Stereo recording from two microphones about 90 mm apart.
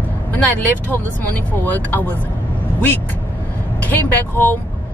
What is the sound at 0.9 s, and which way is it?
Speech, 20° left (ahead or behind).